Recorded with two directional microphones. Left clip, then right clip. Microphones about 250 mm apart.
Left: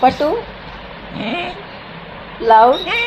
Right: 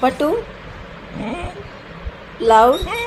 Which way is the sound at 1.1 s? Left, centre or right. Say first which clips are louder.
Left 5 dB; centre.